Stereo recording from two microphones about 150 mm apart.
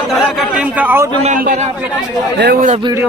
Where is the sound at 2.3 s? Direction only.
90° right.